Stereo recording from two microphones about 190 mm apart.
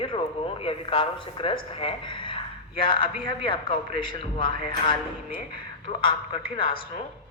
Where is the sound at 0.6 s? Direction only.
30° left (ahead or behind).